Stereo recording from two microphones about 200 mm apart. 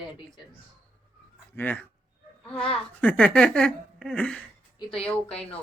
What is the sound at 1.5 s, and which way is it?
Speech, 10° left (ahead or behind).